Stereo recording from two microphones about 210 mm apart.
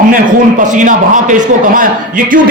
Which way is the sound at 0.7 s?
35° right (ahead or behind).